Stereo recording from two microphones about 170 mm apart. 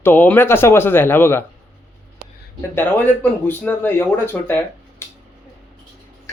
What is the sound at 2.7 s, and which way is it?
Speech, 10° left (ahead or behind).